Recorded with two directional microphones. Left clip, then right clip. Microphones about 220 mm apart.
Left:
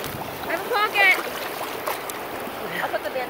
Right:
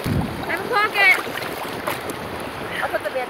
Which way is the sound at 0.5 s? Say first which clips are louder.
Right 2 dB; 35° right (ahead or behind).